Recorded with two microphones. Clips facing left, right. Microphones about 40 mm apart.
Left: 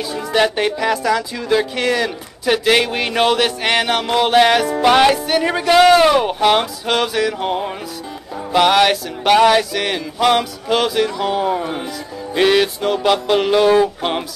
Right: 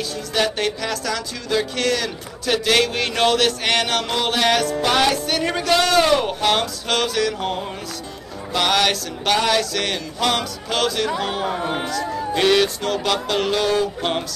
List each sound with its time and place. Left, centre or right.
0.1 s speech: centre
11.1 s speech: centre
11.9 s speech: centre